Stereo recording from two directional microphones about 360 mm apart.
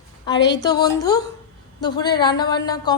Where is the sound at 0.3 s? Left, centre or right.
Centre.